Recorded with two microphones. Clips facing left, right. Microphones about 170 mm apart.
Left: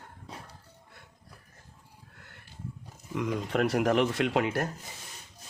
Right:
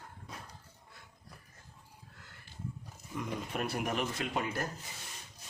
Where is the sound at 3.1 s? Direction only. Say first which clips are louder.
Left 8 dB; 90° left.